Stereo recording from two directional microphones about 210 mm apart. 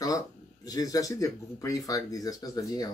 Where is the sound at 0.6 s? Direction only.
15° left (ahead or behind).